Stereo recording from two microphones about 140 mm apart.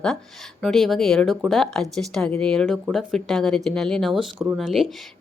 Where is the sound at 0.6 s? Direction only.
Centre (ahead or behind).